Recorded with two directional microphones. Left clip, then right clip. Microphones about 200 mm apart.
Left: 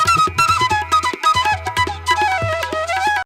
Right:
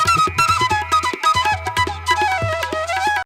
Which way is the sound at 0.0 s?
Centre (ahead or behind).